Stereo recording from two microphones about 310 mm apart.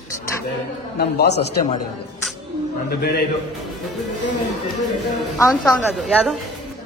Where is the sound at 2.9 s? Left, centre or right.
Left.